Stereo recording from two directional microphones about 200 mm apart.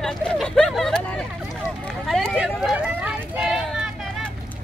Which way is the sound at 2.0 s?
Centre (ahead or behind).